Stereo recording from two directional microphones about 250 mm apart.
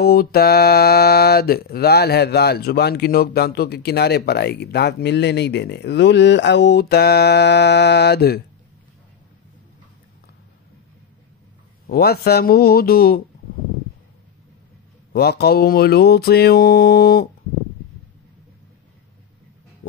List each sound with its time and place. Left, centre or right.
0.0 s mantra: left
11.9 s mantra: left
15.1 s mantra: left
19.8 s dog: left